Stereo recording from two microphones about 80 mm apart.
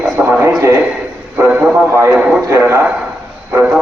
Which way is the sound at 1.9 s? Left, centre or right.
Right.